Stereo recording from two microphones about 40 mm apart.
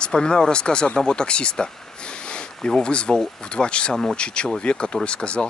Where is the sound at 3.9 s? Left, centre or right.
Centre.